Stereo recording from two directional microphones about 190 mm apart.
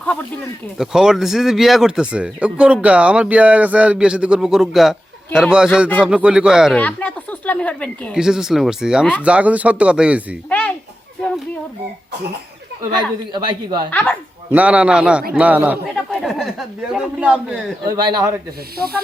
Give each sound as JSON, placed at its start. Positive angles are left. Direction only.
{"t": 0.0, "sound": "speech", "side_deg": 5}
{"t": 6.7, "sound": "speech", "side_deg": 10}
{"t": 10.5, "sound": "a sound", "side_deg": 10}
{"t": 12.9, "sound": "a man's voice", "side_deg": -25}
{"t": 13.9, "sound": "speech", "side_deg": 10}
{"t": 14.5, "sound": "speech", "side_deg": -5}
{"t": 16.0, "sound": "speech", "side_deg": 0}
{"t": 17.9, "sound": "a man's voice", "side_deg": -20}